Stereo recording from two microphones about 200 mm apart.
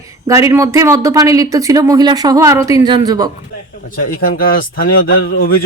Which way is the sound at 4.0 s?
45° left (ahead or behind).